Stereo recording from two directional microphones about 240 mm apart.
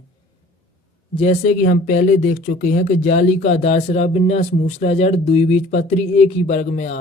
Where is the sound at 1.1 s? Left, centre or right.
Left.